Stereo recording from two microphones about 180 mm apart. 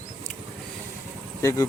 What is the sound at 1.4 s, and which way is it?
Speech, 15° left (ahead or behind).